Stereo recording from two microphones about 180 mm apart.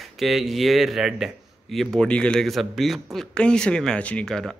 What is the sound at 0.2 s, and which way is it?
Speech, centre (ahead or behind).